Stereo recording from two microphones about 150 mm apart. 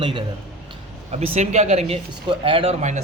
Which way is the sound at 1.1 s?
50° right (ahead or behind).